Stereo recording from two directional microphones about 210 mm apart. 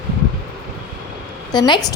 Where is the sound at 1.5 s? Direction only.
20° left (ahead or behind).